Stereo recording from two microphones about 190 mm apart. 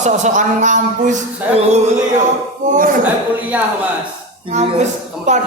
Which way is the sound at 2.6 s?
45° right (ahead or behind).